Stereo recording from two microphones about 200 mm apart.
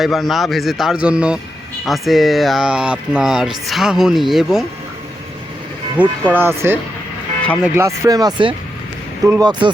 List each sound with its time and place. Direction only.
0.0 s speech: centre (ahead or behind)
6.0 s speech: 10° right (ahead or behind)